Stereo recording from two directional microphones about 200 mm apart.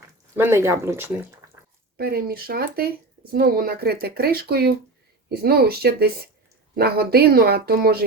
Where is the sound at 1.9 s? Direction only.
50° right (ahead or behind).